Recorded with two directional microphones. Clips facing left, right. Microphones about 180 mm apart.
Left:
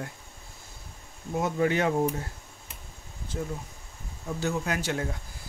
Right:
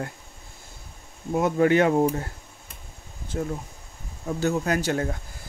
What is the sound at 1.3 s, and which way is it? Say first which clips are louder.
Speech: right 6 dB; 60° right (ahead or behind).